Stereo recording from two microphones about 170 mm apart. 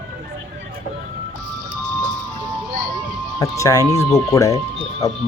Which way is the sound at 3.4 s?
20° left (ahead or behind).